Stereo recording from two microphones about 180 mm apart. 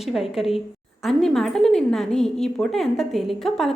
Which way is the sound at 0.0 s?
Centre (ahead or behind).